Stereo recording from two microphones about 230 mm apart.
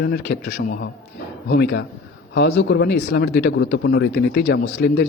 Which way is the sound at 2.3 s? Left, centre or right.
Left.